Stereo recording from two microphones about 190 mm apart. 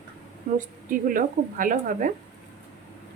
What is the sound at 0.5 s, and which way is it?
A woman's voice, 45° right (ahead or behind).